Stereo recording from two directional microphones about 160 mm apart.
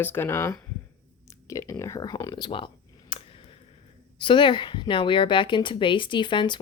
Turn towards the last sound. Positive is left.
turn(degrees=30)  # may be behind; listen again after turning